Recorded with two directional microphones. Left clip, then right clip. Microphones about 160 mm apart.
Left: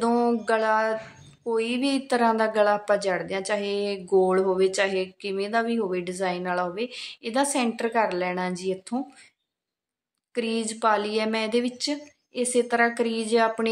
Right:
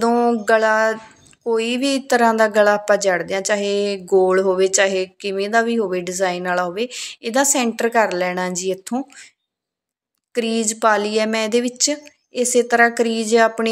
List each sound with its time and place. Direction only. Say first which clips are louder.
0.0 s a sound: right 6 dB; 20° right (ahead or behind)
1.4 s speech: right 6 dB; 25° right (ahead or behind)
10.3 s speech: right 7 dB; 25° right (ahead or behind)